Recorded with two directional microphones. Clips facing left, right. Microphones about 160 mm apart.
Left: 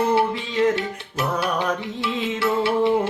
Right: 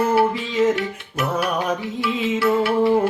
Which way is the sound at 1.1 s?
30° left (ahead or behind).